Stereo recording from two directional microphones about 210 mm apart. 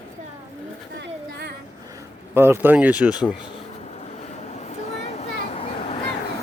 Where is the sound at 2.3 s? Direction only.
10° right (ahead or behind).